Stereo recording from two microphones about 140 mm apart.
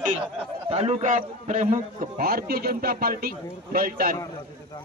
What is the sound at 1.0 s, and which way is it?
A man's voice, 65° right (ahead or behind).